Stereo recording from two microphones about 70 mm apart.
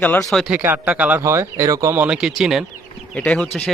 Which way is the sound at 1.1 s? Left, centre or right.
Right.